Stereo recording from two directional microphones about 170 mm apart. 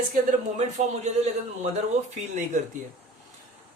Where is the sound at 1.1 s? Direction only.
40° right (ahead or behind).